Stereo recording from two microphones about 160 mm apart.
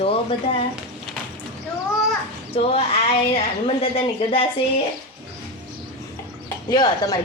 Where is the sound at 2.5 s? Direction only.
40° left (ahead or behind).